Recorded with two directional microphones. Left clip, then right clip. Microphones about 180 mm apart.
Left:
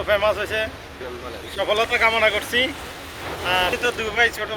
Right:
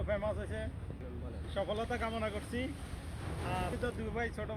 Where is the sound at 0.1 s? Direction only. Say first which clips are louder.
Left 17 dB; 20° right (ahead or behind).